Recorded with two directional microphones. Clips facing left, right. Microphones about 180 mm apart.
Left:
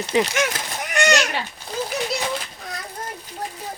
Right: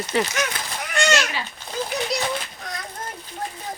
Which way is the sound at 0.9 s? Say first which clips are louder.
Left 2 dB; 15° left (ahead or behind).